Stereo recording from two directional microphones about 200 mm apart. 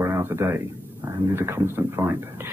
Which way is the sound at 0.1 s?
10° right (ahead or behind).